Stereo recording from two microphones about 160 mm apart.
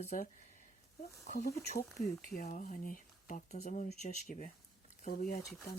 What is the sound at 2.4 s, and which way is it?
Speech, 60° left (ahead or behind).